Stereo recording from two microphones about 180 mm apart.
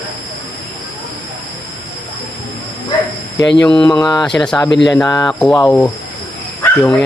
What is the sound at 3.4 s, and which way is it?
Speech, 75° left (ahead or behind).